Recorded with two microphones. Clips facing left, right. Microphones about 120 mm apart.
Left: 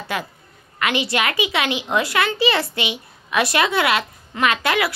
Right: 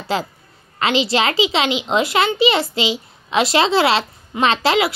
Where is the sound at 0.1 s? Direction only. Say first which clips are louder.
Right 6 dB; 30° right (ahead or behind).